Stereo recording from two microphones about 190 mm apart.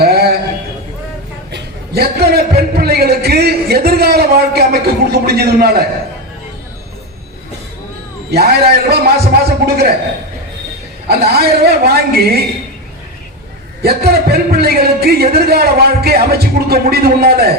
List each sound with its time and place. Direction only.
0.0 s a sound: 55° right (ahead or behind)
1.5 s a man's voice: 55° right (ahead or behind)
8.3 s a man's voice: 55° right (ahead or behind)
11.1 s a man's voice: 55° right (ahead or behind)
13.8 s a man's voice: 55° right (ahead or behind)